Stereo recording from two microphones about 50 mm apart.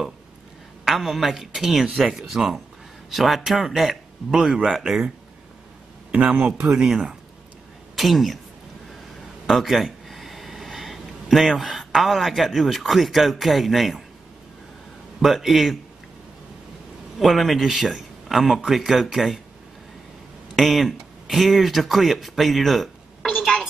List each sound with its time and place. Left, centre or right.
0.8 s speech: centre
6.1 s speech: right
7.9 s a woman's voice: centre
9.5 s speech: centre
15.1 s speech: centre
17.2 s speech: centre
20.5 s speech: centre